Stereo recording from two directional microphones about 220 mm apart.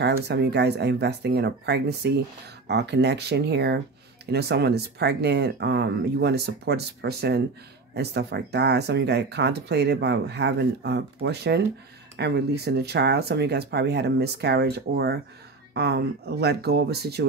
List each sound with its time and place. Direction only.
0.0 s speech: 50° right (ahead or behind)